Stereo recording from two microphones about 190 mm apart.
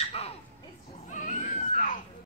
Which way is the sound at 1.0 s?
40° left (ahead or behind).